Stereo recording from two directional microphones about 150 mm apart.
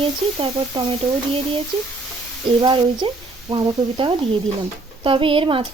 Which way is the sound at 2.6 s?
35° right (ahead or behind).